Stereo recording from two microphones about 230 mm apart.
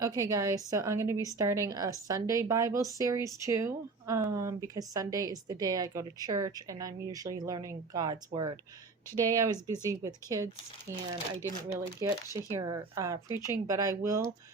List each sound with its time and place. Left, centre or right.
0.0 s speech: centre